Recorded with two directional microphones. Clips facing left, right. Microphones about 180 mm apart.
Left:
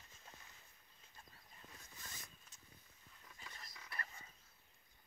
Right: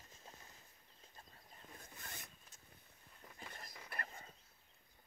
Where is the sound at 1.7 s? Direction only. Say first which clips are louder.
Right 4 dB; 55° right (ahead or behind).